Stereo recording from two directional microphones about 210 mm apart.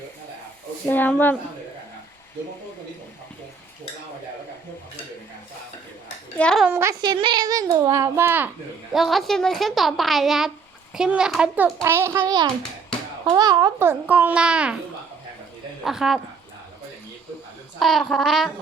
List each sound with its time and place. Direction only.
0.9 s speech: 10° left (ahead or behind)
6.4 s a woman's voice: centre (ahead or behind)
6.7 s a child's voice: 10° right (ahead or behind)
15.8 s a woman's voice: centre (ahead or behind)
17.7 s a woman's voice: centre (ahead or behind)